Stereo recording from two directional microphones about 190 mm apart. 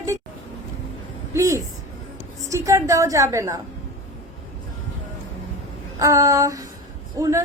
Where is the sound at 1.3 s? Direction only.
15° right (ahead or behind).